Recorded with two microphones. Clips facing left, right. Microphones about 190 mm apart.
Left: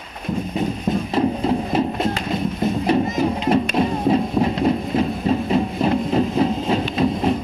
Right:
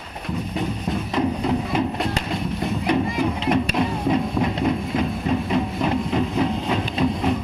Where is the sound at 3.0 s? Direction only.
40° left (ahead or behind).